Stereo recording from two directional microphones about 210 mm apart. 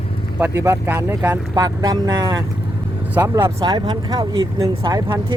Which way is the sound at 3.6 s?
20° right (ahead or behind).